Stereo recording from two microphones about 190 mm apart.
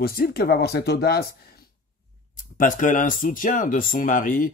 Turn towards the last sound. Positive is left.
turn(degrees=45)  # may be behind; listen again after turning